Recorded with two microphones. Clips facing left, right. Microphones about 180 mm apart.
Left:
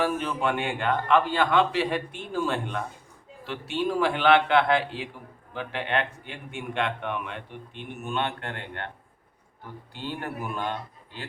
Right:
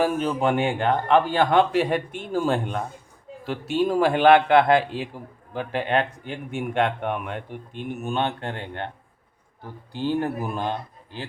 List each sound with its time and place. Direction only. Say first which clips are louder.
0.0 s a man's voice: right 4 dB; 40° right (ahead or behind)
10.4 s a man's voice: right 3 dB; 35° right (ahead or behind)